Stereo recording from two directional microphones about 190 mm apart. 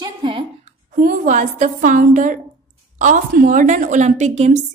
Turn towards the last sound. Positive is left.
turn(degrees=-35)  # may be behind; listen again after turning